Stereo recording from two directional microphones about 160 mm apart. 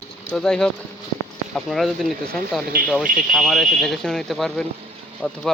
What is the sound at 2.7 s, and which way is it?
Speech, 65° right (ahead or behind).